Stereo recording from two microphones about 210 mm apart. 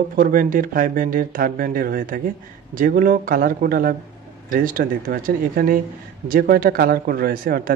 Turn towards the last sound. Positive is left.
turn(degrees=-40)  # may be behind; listen again after turning